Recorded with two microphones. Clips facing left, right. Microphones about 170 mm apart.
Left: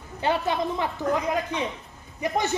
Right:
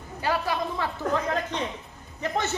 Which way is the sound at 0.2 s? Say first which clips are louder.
Left 2 dB; 25° left (ahead or behind).